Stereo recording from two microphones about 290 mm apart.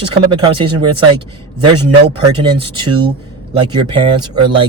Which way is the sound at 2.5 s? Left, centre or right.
Centre.